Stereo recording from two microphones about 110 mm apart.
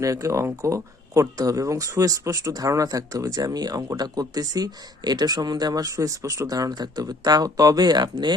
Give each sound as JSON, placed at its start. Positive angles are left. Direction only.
{"t": 0.0, "sound": "speech", "side_deg": -30}